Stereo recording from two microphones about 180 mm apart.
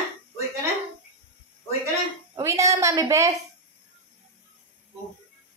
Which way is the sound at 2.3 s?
15° right (ahead or behind).